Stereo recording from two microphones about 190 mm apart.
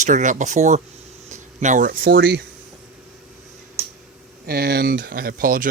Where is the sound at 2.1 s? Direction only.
65° right (ahead or behind).